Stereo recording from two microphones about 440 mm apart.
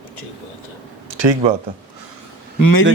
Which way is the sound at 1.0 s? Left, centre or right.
Right.